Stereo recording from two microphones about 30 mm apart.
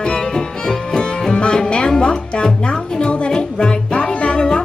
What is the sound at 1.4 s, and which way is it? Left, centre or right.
Music, left.